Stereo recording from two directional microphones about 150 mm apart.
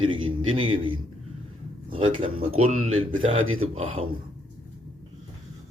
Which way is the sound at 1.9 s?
35° right (ahead or behind).